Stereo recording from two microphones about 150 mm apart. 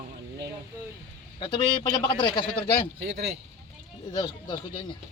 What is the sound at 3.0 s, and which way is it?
Speech, 90° right.